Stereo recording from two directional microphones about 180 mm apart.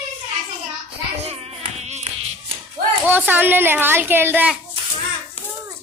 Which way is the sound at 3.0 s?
10° right (ahead or behind).